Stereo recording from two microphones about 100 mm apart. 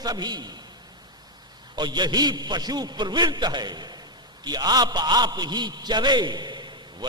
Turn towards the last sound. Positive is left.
turn(degrees=-50)  # may be behind; listen again after turning